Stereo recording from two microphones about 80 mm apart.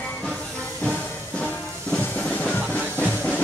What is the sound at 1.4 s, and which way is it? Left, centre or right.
Music, centre.